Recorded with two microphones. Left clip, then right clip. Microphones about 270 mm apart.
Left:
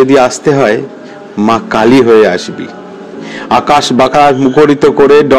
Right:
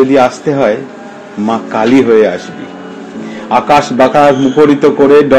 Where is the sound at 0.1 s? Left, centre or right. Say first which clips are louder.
Left 2 dB; left.